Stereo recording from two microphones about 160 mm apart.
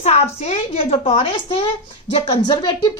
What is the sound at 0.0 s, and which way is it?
A woman's voice, 45° left (ahead or behind).